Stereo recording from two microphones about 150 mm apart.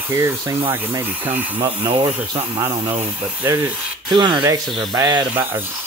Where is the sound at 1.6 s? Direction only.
30° right (ahead or behind).